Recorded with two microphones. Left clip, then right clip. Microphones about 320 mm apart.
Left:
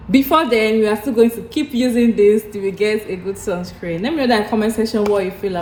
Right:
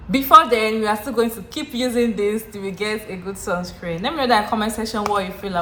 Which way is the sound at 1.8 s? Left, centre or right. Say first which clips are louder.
Left 7 dB; right.